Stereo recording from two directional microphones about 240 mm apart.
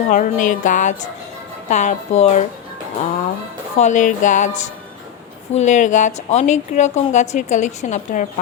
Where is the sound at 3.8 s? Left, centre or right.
Left.